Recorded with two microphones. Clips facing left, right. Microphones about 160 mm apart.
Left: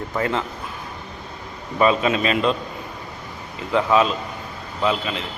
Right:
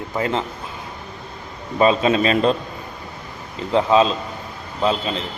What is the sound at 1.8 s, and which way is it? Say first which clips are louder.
Speech: right 2 dB; 30° right (ahead or behind).